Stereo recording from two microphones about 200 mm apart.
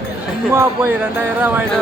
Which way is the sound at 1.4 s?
10° right (ahead or behind).